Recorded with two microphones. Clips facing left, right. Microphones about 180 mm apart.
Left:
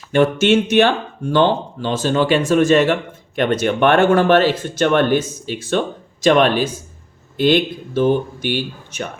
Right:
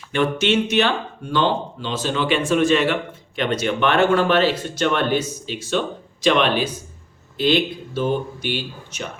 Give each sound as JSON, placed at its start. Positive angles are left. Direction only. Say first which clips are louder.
{"t": 0.1, "sound": "speech", "louder": "left 5 dB", "side_deg": 45}